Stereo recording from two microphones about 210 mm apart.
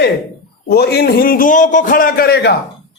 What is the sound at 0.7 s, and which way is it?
A man's voice, 50° left (ahead or behind).